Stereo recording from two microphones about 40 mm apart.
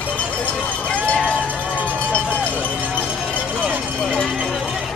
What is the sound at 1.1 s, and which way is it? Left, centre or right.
Run, left.